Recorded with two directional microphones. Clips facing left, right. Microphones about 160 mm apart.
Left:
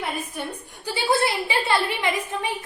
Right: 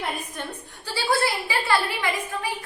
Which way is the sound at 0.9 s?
20° left (ahead or behind).